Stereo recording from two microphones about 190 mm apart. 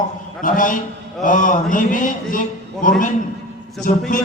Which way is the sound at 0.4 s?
45° left (ahead or behind).